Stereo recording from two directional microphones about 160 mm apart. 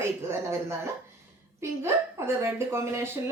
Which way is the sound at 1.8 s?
15° right (ahead or behind).